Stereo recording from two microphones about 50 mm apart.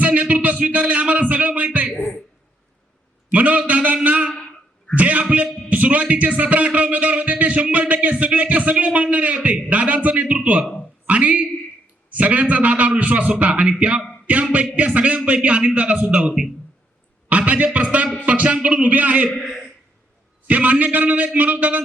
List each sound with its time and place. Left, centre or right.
0.0 s a sound: right
3.3 s a man's voice: right
10.3 s a sound: right
11.0 s a woman's voice: right
19.3 s a man's voice: centre
20.5 s a man's voice: right